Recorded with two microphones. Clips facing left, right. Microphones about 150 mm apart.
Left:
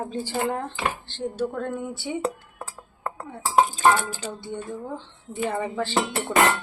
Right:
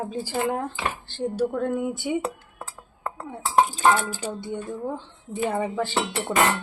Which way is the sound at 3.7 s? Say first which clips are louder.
Even; 10° right (ahead or behind).